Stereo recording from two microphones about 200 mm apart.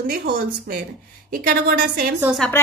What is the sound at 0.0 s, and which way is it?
A woman's voice, 50° right (ahead or behind).